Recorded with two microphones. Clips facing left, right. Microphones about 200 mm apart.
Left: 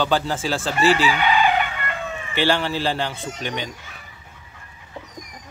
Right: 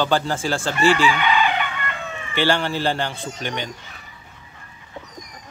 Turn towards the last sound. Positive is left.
turn(degrees=0)  # may be behind; listen again after turning